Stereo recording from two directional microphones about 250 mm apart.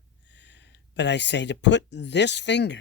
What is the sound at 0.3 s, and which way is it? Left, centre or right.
A woman's voice, left.